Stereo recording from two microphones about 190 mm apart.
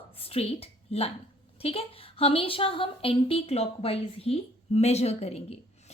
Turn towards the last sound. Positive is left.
turn(degrees=35)  # may be behind; listen again after turning